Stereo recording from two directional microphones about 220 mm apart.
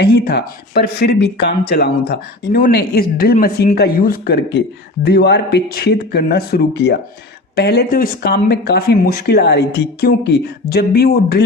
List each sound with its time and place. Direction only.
0.0 s speech: 50° left (ahead or behind)